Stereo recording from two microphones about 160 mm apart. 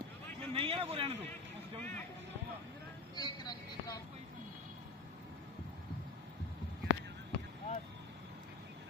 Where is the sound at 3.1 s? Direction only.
25° left (ahead or behind).